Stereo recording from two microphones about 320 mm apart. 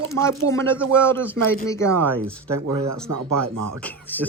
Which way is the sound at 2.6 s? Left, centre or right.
Right.